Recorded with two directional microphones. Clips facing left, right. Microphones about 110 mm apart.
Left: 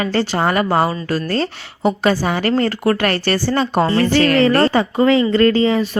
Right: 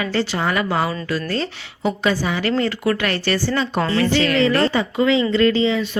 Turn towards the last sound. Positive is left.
turn(degrees=45)  # may be behind; listen again after turning